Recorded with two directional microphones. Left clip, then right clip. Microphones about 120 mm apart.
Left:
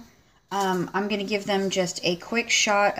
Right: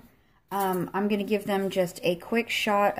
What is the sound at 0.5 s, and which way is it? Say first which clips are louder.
Speech: left 2 dB; 35° right (ahead or behind).